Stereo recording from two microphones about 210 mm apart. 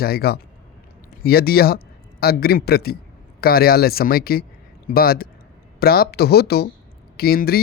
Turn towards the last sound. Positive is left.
turn(degrees=45)  # may be behind; listen again after turning